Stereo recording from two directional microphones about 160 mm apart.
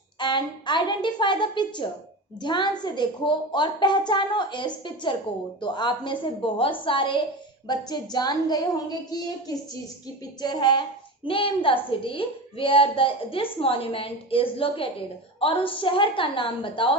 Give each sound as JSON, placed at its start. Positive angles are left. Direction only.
{"t": 0.2, "sound": "a woman's voice", "side_deg": 30}